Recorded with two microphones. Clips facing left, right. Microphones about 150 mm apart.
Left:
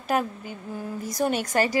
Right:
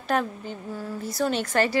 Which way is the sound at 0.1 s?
10° left (ahead or behind).